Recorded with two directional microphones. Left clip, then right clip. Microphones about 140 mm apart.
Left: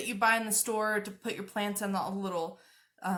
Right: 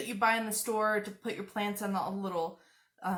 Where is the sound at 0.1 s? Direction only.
15° left (ahead or behind).